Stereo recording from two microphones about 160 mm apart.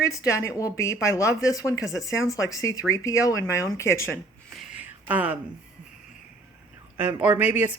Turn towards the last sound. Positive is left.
turn(degrees=-10)  # may be behind; listen again after turning